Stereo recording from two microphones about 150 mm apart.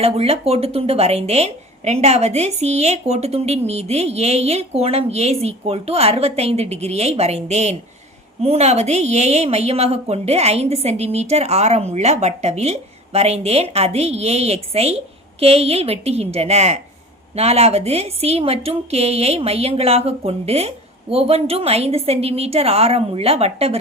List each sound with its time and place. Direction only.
0.0 s a woman's voice: 40° right (ahead or behind)